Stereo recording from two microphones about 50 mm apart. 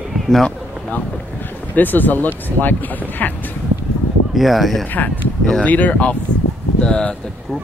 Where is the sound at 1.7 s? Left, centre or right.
Left.